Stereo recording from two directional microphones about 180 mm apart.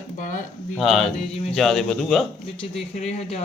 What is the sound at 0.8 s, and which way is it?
A man's voice, centre (ahead or behind).